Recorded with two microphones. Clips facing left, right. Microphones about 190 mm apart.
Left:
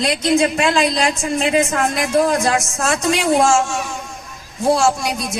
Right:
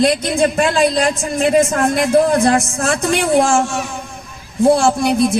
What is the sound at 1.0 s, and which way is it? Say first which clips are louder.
Speech: right 2 dB; 55° right (ahead or behind).